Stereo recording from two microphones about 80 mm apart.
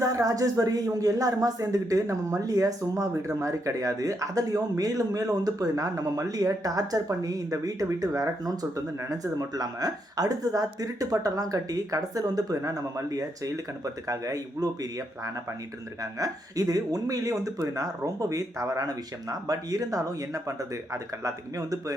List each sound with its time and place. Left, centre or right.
0.0 s speech: right